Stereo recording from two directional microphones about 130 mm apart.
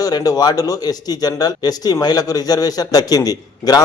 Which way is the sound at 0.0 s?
30° left (ahead or behind).